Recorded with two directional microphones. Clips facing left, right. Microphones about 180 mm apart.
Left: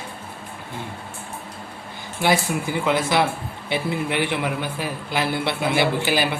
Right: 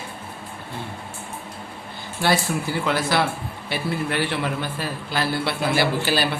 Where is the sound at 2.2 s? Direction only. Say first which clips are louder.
Left 1 dB; 15° left (ahead or behind).